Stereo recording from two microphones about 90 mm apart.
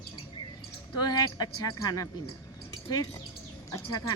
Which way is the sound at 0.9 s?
50° left (ahead or behind).